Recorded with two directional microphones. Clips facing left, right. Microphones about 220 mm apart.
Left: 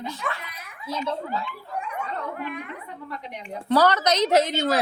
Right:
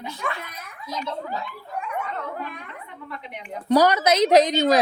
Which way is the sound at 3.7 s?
15° right (ahead or behind).